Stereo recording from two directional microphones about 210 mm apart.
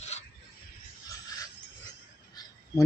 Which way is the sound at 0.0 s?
30° left (ahead or behind).